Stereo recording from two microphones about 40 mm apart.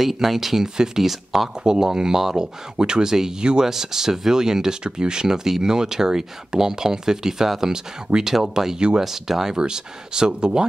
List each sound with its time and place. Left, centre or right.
0.0 s speech: centre